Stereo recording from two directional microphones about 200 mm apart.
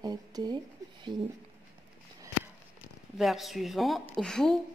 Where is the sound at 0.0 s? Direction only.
20° right (ahead or behind).